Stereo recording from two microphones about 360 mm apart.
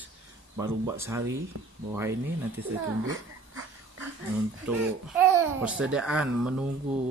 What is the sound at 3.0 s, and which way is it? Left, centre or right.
Speech, right.